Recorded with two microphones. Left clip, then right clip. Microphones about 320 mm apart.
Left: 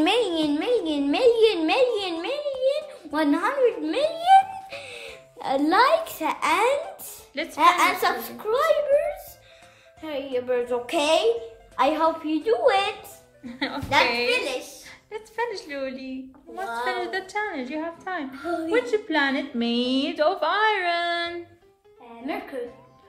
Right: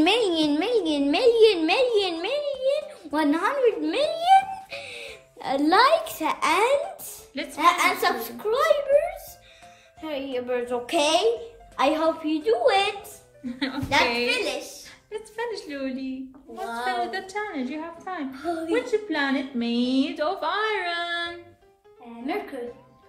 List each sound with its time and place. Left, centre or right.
0.0 s a sound: centre
7.3 s a woman's voice: centre
13.5 s a woman's voice: centre
14.3 s a child's voice: centre
15.0 s a woman's voice: centre